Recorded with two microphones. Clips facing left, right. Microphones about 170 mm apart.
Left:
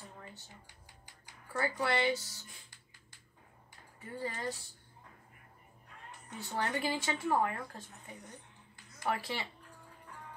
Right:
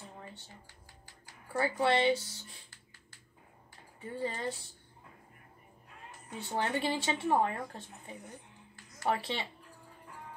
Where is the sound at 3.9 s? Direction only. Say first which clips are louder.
Right 3 dB; 25° right (ahead or behind).